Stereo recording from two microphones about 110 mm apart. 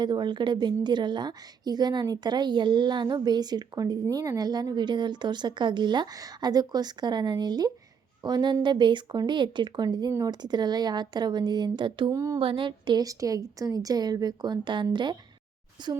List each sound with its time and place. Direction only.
0.0 s a woman's voice: 45° right (ahead or behind)
12.1 s speech: 30° right (ahead or behind)
12.4 s a woman's voice: 50° right (ahead or behind)